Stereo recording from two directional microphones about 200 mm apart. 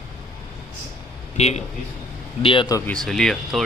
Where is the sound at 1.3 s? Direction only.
30° left (ahead or behind).